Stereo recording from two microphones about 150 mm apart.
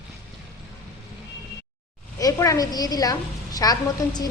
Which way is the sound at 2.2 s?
20° left (ahead or behind).